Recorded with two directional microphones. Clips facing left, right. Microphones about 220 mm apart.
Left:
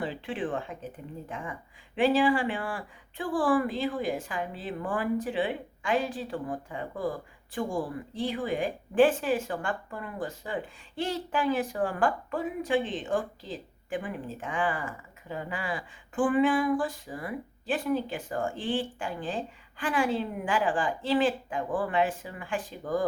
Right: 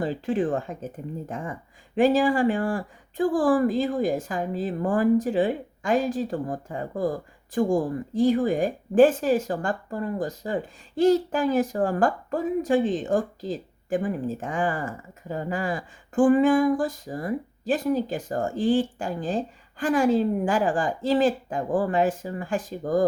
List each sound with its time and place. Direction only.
0.0 s a woman's voice: 40° right (ahead or behind)